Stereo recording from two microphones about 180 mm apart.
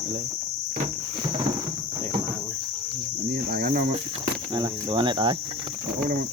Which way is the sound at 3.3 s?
55° right (ahead or behind).